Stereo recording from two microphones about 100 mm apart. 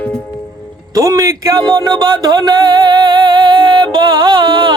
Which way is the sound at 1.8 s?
45° right (ahead or behind).